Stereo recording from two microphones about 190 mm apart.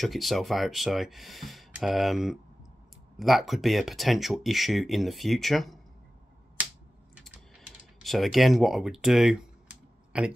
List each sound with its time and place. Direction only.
0.0 s speech: centre (ahead or behind)
8.0 s speech: centre (ahead or behind)